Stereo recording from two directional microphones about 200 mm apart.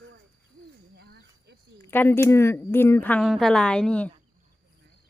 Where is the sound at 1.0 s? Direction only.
55° right (ahead or behind).